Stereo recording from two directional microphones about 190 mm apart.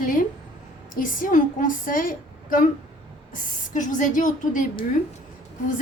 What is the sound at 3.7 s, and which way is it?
Speech, 45° left (ahead or behind).